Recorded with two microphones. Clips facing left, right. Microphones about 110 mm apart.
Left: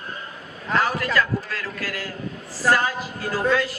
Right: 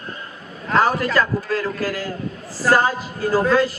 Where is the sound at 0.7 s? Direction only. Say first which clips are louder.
Right 5 dB; 35° right (ahead or behind).